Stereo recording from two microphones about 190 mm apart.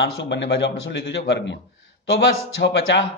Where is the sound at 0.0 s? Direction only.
70° left (ahead or behind).